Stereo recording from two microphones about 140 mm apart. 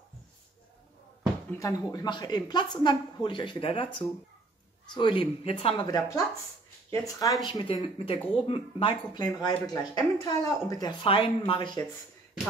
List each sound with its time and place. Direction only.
1.5 s speech: 25° left (ahead or behind); by 5.9 s 40° left (ahead or behind)
5.9 s speech: 25° left (ahead or behind)
7.4 s speech: 35° left (ahead or behind)